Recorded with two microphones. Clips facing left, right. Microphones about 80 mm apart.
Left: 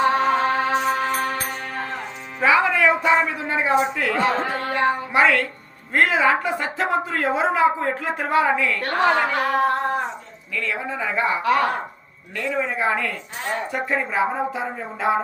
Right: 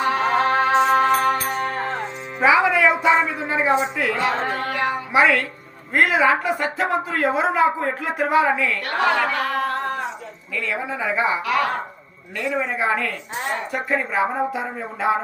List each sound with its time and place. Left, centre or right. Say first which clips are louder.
0.0 s music: left 2 dB; left
0.3 s music: right 2 dB; right
2.4 s speech: right 1 dB; centre
4.2 s speech: left 1 dB; left
5.1 s speech: right 4 dB; centre
8.8 s speech: left 2 dB; left
10.5 s speech: even; centre
11.4 s speech: left 2 dB; left
12.5 s speech: even; centre